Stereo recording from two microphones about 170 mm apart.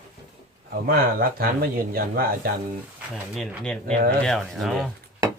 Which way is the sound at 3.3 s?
Centre (ahead or behind).